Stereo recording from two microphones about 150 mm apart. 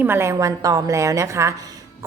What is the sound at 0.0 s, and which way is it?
A woman's voice, 15° right (ahead or behind).